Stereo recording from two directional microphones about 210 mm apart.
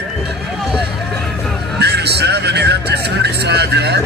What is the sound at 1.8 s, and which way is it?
Speech, 50° right (ahead or behind).